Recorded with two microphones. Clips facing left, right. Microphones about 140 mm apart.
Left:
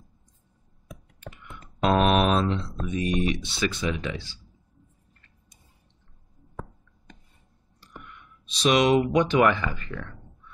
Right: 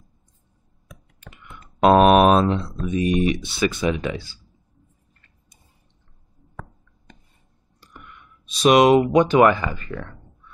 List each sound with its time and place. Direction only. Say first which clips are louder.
1.8 s a sound: right 8 dB; 55° right (ahead or behind)
2.8 s speech: right 6 dB; 5° right (ahead or behind)
4.0 s speech: right 5 dB; 50° right (ahead or behind)
8.5 s speech: right 6 dB; 50° right (ahead or behind)
9.5 s speech: right 4 dB; 5° right (ahead or behind)